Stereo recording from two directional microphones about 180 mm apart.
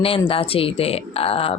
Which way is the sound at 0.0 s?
30° left (ahead or behind).